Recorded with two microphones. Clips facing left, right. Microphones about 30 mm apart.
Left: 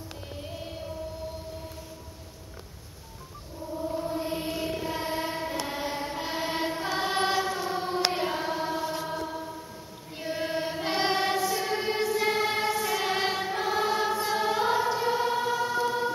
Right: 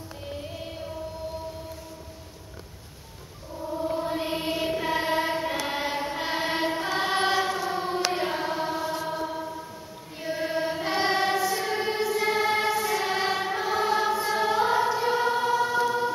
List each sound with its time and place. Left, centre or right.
0.4 s music: centre
3.8 s choir: right
5.3 s a sound: right
5.7 s chant: right
6.8 s choir: centre
7.7 s choir: centre
8.1 s mantra: centre
9.0 s chant: centre
10.1 s choir: centre
15.0 s choir: centre